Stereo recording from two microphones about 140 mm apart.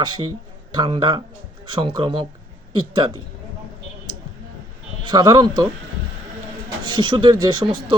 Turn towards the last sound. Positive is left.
turn(degrees=-35)  # may be behind; listen again after turning